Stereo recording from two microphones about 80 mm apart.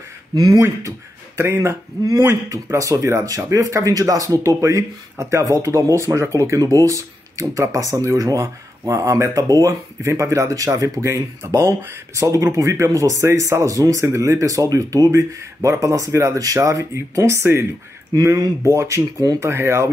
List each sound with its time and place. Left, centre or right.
0.3 s speech: right
0.6 s speech: right
18.1 s speech: right